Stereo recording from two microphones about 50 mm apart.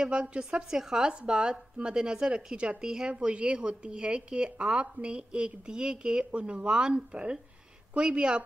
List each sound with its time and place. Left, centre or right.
0.0 s a woman's voice: centre